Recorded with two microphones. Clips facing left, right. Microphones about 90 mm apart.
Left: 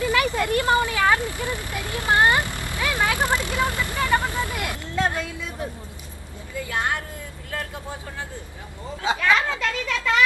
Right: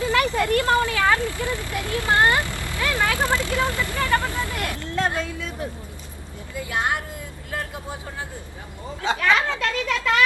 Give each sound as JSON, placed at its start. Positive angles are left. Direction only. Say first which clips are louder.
{"t": 0.2, "sound": "vehicle", "louder": "right 1 dB", "side_deg": 15}
{"t": 6.6, "sound": "speech", "louder": "right 1 dB", "side_deg": -20}
{"t": 9.0, "sound": "a woman's voice", "louder": "even", "side_deg": 0}